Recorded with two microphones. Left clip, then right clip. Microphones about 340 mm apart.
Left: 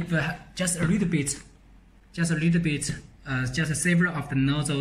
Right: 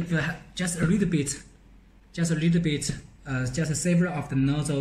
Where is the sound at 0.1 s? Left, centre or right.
Centre.